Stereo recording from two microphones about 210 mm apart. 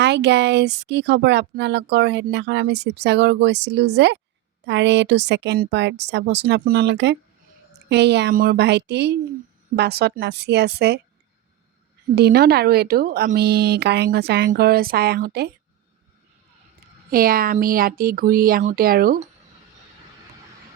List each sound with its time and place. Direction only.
0.0 s speech: 55° right (ahead or behind)
12.1 s speech: 50° right (ahead or behind)
17.1 s speech: 45° right (ahead or behind)